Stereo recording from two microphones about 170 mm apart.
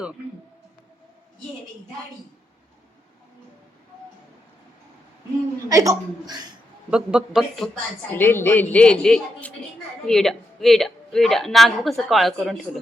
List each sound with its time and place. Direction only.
5.6 s a woman's voice: 20° right (ahead or behind)
6.9 s speech: 5° right (ahead or behind)
8.1 s a woman's voice: 15° left (ahead or behind)